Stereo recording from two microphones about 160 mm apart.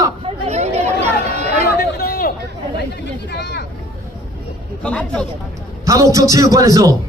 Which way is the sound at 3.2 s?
90° left.